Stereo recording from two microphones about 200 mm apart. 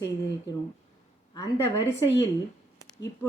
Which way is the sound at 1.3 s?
20° left (ahead or behind).